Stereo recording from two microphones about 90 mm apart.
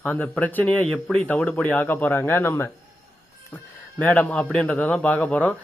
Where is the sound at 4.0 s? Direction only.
20° left (ahead or behind).